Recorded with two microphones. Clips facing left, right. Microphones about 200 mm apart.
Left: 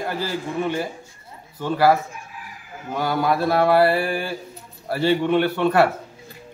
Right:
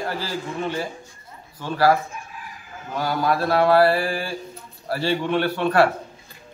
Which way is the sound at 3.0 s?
20° left (ahead or behind).